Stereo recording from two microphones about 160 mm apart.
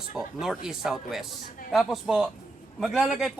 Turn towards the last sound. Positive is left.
turn(degrees=-5)  # may be behind; listen again after turning